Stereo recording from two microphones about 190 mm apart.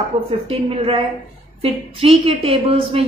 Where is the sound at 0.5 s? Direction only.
30° right (ahead or behind).